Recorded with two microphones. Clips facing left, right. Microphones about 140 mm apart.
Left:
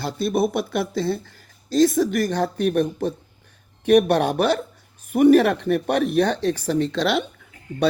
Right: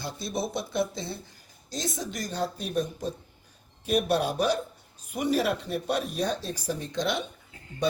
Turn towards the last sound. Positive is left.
turn(degrees=70)  # may be behind; listen again after turning